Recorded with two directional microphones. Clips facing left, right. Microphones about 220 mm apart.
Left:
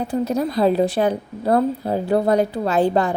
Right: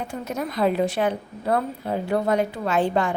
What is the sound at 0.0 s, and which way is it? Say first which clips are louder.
A woman's voice: left 8 dB; 35° left (ahead or behind).